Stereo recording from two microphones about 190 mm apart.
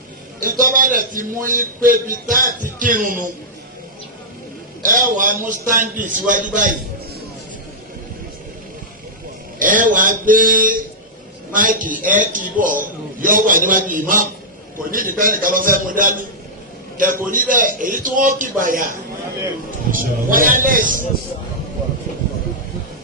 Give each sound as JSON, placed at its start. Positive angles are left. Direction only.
{"t": 0.3, "sound": "a man's voice", "side_deg": -45}
{"t": 4.8, "sound": "a man's voice", "side_deg": -45}
{"t": 9.6, "sound": "a man's voice", "side_deg": -45}
{"t": 17.2, "sound": "a man's voice", "side_deg": -45}